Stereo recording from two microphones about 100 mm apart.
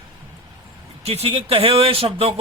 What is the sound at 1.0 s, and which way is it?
Speech, 90° right.